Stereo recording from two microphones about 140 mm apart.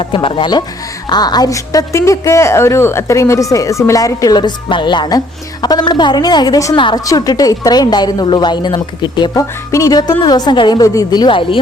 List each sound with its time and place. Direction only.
0.0 s a woman's voice: 40° left (ahead or behind)